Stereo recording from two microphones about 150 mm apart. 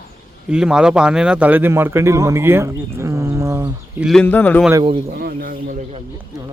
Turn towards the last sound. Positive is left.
turn(degrees=-65)  # may be behind; listen again after turning